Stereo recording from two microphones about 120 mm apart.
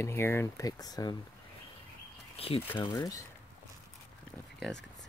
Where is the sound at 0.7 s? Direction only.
30° left (ahead or behind).